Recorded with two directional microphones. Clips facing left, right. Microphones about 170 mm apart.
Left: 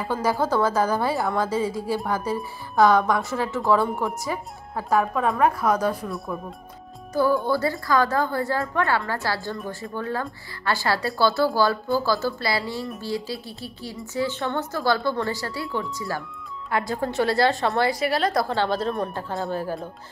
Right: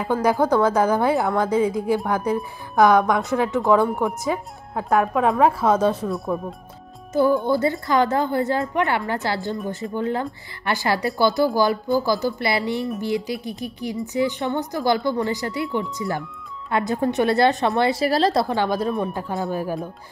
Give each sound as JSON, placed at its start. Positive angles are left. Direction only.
{"t": 0.0, "sound": "a woman's voice", "side_deg": -15}
{"t": 7.2, "sound": "a woman's voice", "side_deg": -20}
{"t": 18.0, "sound": "a woman's voice", "side_deg": -35}
{"t": 18.6, "sound": "a woman's voice", "side_deg": -10}